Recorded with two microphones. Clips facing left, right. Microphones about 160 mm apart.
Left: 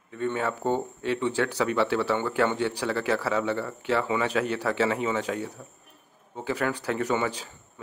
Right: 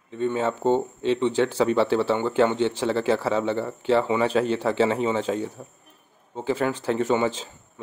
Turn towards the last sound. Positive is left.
turn(degrees=-25)  # may be behind; listen again after turning